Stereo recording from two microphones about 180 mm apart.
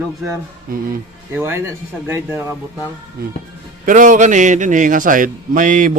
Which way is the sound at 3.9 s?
45° right (ahead or behind).